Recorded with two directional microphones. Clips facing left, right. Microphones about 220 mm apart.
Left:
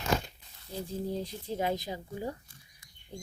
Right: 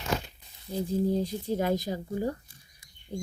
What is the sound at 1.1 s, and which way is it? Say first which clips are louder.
Speech: right 7 dB; 45° right (ahead or behind).